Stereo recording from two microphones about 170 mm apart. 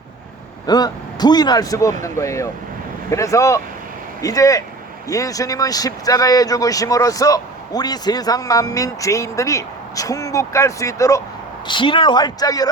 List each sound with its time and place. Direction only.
0.7 s speech: 25° left (ahead or behind)